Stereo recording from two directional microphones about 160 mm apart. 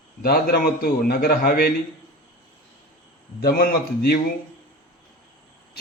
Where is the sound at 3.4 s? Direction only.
70° left (ahead or behind).